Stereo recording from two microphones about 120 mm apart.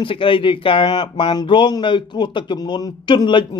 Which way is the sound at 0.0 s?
45° left (ahead or behind).